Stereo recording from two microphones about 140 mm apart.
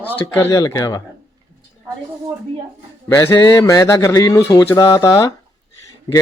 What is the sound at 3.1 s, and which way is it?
Speech, 20° left (ahead or behind).